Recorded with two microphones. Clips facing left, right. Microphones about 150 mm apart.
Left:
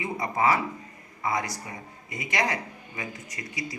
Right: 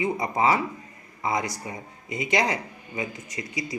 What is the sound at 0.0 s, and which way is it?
A man's voice, 20° right (ahead or behind).